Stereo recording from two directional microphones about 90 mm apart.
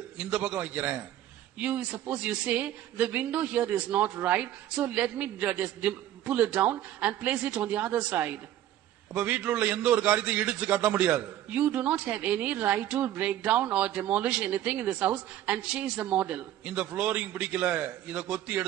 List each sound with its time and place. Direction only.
0.3 s a man's voice: 15° right (ahead or behind)